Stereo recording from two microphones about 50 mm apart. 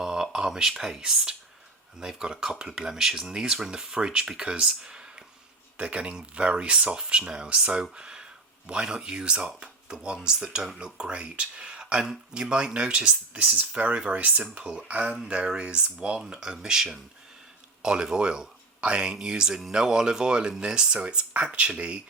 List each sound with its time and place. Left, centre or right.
0.0 s speech: centre